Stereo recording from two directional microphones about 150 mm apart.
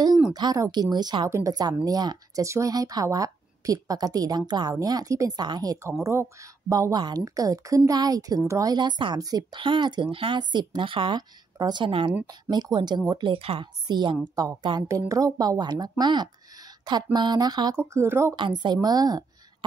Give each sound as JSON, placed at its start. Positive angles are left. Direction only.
{"t": 0.3, "sound": "a woman's voice", "side_deg": -25}
{"t": 13.3, "sound": "a woman's voice", "side_deg": -35}
{"t": 17.7, "sound": "speech", "side_deg": -15}
{"t": 18.3, "sound": "speech", "side_deg": -30}